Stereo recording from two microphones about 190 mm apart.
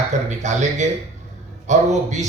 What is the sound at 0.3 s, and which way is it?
Speech, 35° right (ahead or behind).